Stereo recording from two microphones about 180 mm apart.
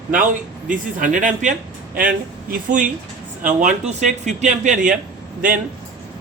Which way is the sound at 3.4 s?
40° right (ahead or behind).